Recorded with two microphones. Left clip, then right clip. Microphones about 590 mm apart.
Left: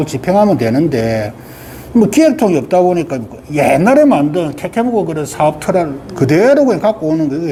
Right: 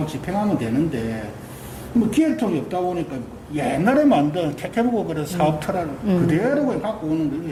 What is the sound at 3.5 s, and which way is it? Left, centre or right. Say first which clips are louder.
Speech: left 10 dB; left.